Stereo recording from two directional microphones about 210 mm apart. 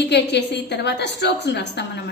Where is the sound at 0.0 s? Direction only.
55° left (ahead or behind).